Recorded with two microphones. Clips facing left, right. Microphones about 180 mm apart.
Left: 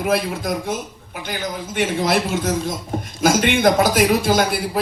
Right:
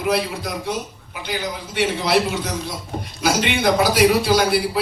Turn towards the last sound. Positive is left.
turn(degrees=50)  # may be behind; listen again after turning